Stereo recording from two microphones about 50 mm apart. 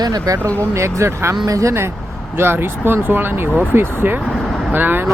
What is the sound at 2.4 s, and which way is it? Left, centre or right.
Speech, right.